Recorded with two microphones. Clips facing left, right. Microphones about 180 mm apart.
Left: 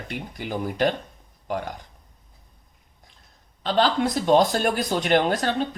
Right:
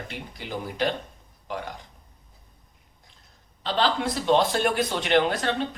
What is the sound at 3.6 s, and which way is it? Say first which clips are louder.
Speech: left 3 dB; 45° left (ahead or behind).